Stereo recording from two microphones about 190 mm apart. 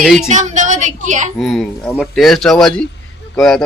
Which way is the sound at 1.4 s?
Centre (ahead or behind).